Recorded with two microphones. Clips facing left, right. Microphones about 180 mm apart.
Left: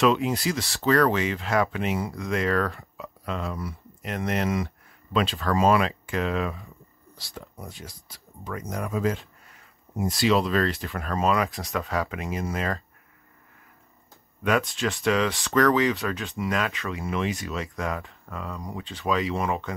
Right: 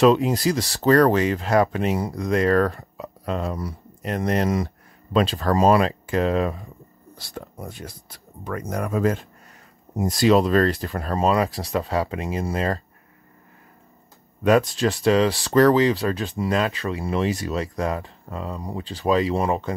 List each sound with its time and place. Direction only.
0.0 s speech: 35° right (ahead or behind)
7.2 s speech: 55° right (ahead or behind); by 12.8 s 30° right (ahead or behind)
14.4 s speech: 35° right (ahead or behind)